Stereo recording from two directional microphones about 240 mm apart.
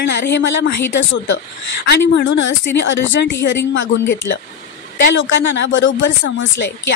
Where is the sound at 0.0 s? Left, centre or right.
Left.